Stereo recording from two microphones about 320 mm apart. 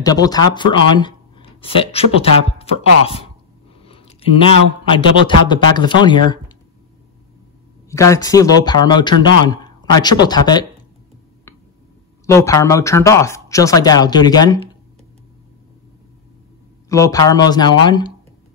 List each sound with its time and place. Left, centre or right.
0.0 s a man's voice: centre
7.9 s speech: centre
12.3 s speech: centre
16.9 s speech: centre